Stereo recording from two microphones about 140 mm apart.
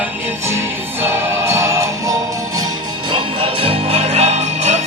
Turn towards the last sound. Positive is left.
turn(degrees=-50)  # may be behind; listen again after turning